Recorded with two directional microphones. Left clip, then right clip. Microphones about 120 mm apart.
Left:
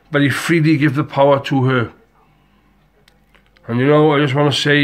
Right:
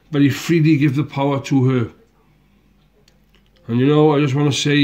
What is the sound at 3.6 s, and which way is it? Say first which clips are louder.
Speech: left 2 dB; 30° right (ahead or behind).